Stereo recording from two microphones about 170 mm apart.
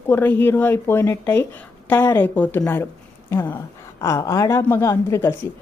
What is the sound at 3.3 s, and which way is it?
Speech, 25° left (ahead or behind).